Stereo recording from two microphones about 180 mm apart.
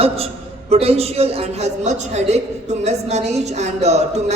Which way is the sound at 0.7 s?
35° right (ahead or behind).